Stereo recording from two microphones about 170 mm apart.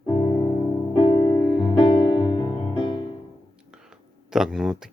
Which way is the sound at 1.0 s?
30° left (ahead or behind).